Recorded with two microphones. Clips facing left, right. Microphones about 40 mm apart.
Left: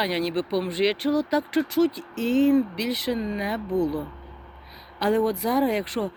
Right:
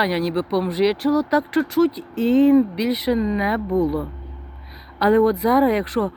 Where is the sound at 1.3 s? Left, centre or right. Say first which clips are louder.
Right 4 dB; centre.